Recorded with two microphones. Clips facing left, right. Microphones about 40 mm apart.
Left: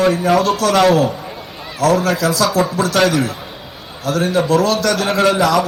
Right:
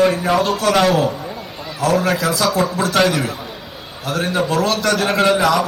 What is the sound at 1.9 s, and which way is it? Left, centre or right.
Speech, right.